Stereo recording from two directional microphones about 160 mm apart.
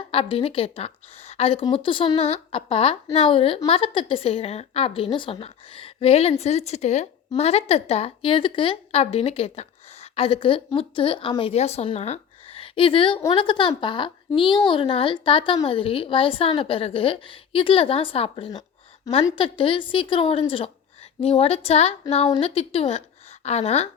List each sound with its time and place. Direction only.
0.1 s a woman's voice: 35° left (ahead or behind)